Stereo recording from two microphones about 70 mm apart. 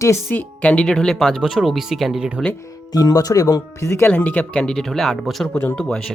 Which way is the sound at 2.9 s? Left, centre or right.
Left.